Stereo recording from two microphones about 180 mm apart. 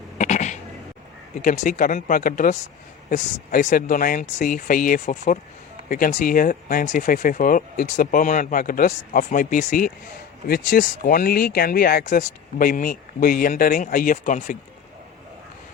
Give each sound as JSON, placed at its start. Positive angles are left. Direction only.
{"t": 0.2, "sound": "cat", "side_deg": 40}
{"t": 1.4, "sound": "speech", "side_deg": 45}